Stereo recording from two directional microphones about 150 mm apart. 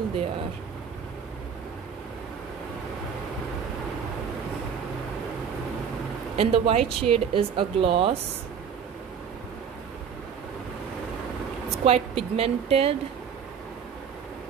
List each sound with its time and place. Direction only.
6.3 s speech: 40° right (ahead or behind)
11.8 s speech: 45° right (ahead or behind)